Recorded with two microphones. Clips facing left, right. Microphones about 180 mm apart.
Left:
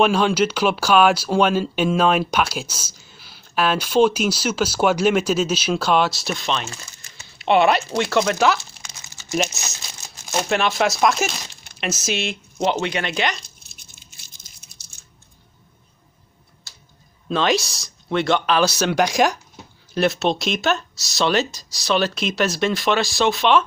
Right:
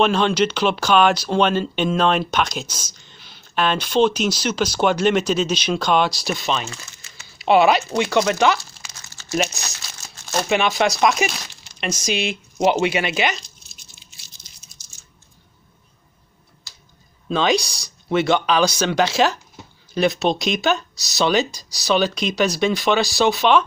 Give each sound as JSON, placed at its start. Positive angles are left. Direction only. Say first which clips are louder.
{"t": 0.0, "sound": "speech", "louder": "even", "side_deg": 10}
{"t": 9.0, "sound": "crumpling", "louder": "even", "side_deg": 15}
{"t": 9.3, "sound": "speech", "louder": "right 1 dB", "side_deg": 0}
{"t": 9.6, "sound": "speech", "louder": "even", "side_deg": 20}
{"t": 10.4, "sound": "speech", "louder": "right 1 dB", "side_deg": 0}
{"t": 12.5, "sound": "speech", "louder": "right 4 dB", "side_deg": -10}
{"t": 13.4, "sound": "toothbrush", "louder": "right 1 dB", "side_deg": 55}
{"t": 17.3, "sound": "speech", "louder": "right 1 dB", "side_deg": 0}
{"t": 19.5, "sound": "speech", "louder": "even", "side_deg": 0}